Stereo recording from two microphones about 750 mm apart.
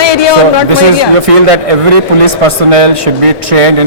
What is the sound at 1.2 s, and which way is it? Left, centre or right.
A man's voice, right.